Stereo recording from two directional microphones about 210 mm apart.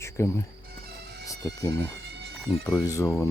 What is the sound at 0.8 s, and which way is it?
Music, 50° right (ahead or behind).